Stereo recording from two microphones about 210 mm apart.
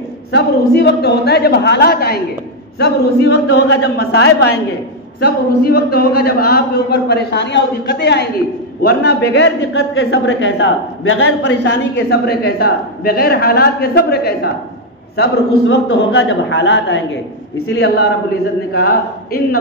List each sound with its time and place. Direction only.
0.3 s a man's voice: 50° left (ahead or behind)
15.7 s a woman's voice: 60° left (ahead or behind)